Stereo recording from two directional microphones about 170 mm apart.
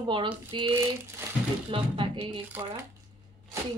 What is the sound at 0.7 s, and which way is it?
Crumpling, 15° right (ahead or behind).